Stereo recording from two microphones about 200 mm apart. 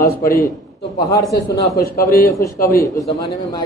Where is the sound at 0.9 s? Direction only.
15° left (ahead or behind).